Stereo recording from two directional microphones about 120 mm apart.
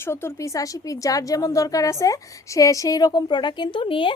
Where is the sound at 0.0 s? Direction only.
20° left (ahead or behind).